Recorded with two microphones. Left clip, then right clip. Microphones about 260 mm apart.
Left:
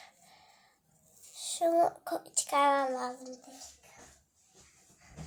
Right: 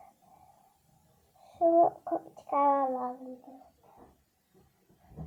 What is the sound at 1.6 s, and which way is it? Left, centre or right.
Speech, left.